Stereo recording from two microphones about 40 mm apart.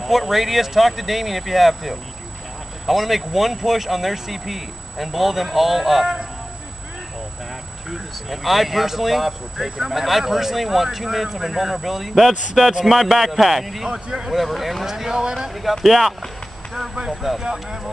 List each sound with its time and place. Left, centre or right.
0.0 s speech: centre
7.9 s speech: centre
14.0 s speech: centre
14.3 s speech: centre
15.8 s speech: centre
17.4 s speech: centre